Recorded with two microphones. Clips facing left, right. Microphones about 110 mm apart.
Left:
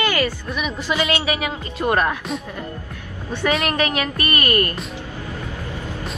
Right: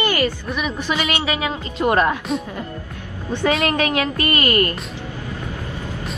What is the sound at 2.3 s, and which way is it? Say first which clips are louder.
Speech: right 4 dB; centre (ahead or behind).